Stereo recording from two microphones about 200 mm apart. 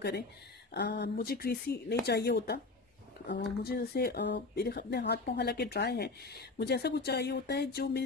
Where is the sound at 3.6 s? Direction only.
50° left (ahead or behind).